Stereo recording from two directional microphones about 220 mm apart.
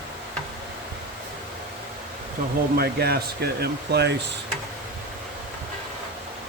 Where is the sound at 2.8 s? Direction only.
45° right (ahead or behind).